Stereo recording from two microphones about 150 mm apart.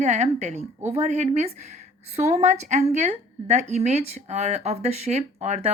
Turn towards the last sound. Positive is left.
turn(degrees=-50)  # may be behind; listen again after turning